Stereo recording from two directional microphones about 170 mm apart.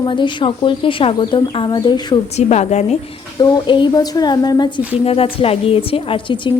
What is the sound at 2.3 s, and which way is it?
Speech, 40° left (ahead or behind).